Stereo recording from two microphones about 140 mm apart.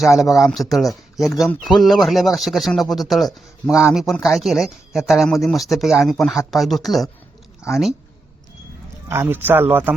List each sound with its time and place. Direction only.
0.0 s speech: centre (ahead or behind)
9.0 s speech: 15° right (ahead or behind)